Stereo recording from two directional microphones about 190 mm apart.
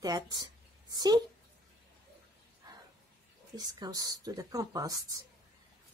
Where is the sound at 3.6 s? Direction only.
20° right (ahead or behind).